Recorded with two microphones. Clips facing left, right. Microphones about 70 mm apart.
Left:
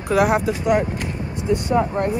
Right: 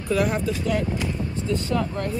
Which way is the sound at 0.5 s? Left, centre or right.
Centre.